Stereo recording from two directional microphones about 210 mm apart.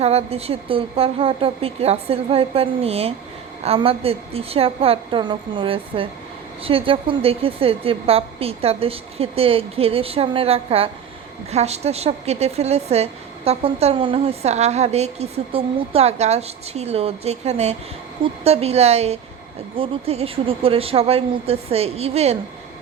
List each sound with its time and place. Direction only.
0.0 s a woman's voice: 30° right (ahead or behind)